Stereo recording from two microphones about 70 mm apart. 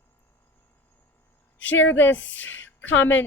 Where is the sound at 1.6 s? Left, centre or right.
Left.